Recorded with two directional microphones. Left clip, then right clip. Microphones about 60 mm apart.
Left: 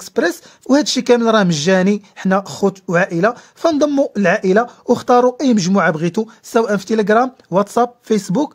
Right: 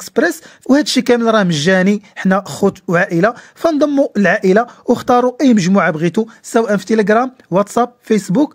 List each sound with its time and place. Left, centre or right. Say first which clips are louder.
0.0 s speech: right 2 dB; right; by 8.5 s centre